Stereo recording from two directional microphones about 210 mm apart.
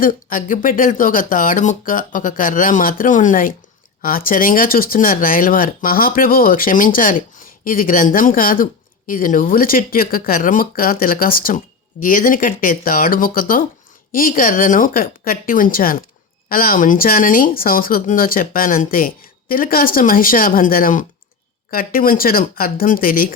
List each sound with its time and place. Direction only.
0.0 s speech: 40° left (ahead or behind)